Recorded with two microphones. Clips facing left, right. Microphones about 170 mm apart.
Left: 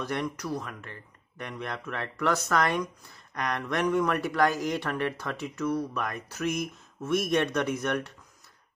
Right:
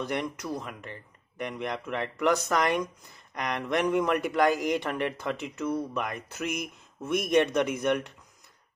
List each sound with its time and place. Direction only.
0.0 s speech: 20° right (ahead or behind)